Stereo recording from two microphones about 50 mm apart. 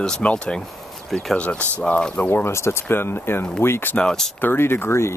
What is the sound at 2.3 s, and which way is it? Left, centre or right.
Speech, left.